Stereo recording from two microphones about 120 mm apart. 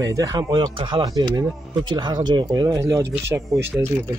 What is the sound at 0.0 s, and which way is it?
Speech, 30° right (ahead or behind).